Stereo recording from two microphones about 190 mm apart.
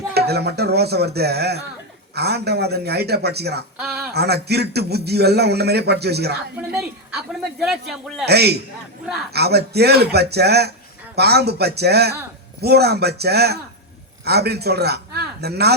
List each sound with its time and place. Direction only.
0.1 s a man's voice: 60° right (ahead or behind)
3.8 s a sound: 5° right (ahead or behind)
4.1 s a man's voice: 60° right (ahead or behind)
7.6 s a man's voice: centre (ahead or behind)
8.2 s a man's voice: 60° right (ahead or behind)